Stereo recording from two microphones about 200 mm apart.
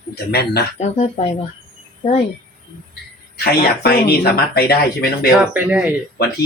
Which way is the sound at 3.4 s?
50° left (ahead or behind).